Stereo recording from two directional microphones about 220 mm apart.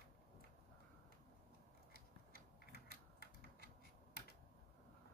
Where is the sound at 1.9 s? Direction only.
45° left (ahead or behind).